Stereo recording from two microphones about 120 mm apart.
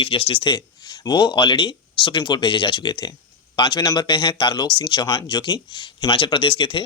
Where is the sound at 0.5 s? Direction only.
40° left (ahead or behind).